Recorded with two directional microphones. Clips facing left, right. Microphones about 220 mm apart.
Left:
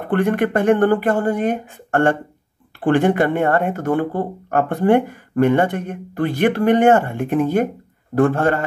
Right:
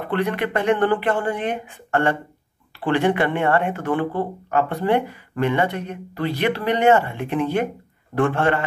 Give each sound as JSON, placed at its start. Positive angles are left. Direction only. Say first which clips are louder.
{"t": 0.0, "sound": "speech", "louder": "left 5 dB", "side_deg": 50}